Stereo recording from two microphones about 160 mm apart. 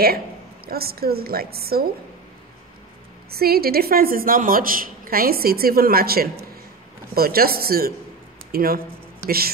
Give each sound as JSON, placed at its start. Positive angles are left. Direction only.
{"t": 0.7, "sound": "a woman's voice", "side_deg": -70}
{"t": 3.3, "sound": "a woman's voice", "side_deg": -75}